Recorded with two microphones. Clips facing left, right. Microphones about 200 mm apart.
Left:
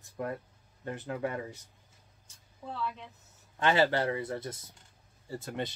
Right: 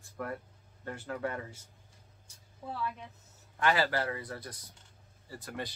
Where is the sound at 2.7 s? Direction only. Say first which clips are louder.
Left 1 dB; 10° right (ahead or behind).